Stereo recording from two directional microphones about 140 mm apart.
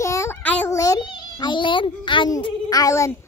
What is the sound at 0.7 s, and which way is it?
A child's voice, 25° left (ahead or behind).